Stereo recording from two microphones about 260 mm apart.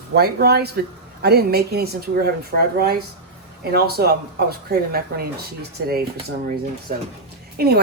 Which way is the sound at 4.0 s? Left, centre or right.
Right.